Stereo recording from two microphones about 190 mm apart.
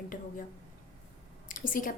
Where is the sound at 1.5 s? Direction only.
45° left (ahead or behind).